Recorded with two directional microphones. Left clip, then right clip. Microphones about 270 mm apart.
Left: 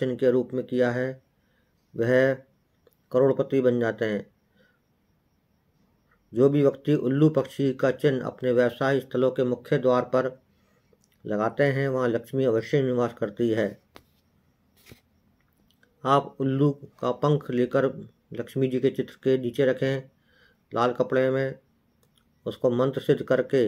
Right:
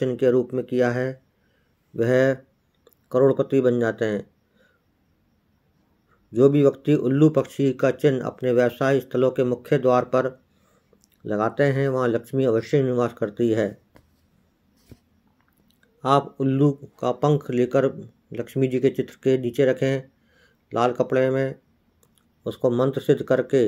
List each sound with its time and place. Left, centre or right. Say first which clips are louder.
0.0 s speech: right 3 dB; centre
6.3 s speech: right 4 dB; centre
16.0 s speech: right 2 dB; centre